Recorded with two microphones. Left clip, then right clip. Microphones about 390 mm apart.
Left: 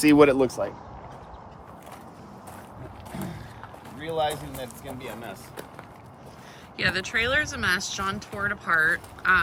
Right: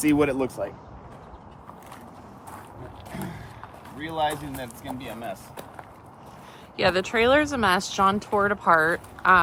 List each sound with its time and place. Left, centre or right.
0.1 s speech: left
3.9 s speech: centre
6.7 s speech: centre